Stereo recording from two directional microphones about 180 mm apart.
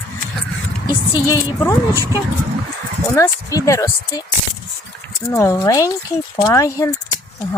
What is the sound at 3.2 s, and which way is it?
A woman's voice, 15° left (ahead or behind).